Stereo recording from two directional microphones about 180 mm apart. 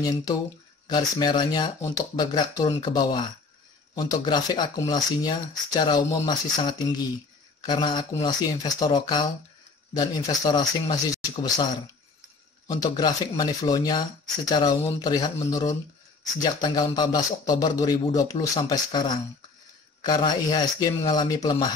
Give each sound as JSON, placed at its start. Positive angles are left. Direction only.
{"t": 0.8, "sound": "speech", "side_deg": 25}
{"t": 12.6, "sound": "speech", "side_deg": 20}